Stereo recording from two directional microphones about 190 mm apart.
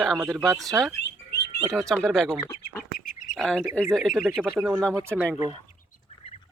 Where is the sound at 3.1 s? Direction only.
45° left (ahead or behind).